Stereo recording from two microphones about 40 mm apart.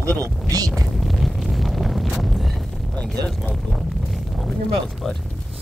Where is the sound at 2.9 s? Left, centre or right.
Left.